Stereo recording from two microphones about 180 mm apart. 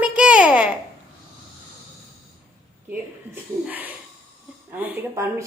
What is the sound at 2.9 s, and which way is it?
Speech, 10° right (ahead or behind).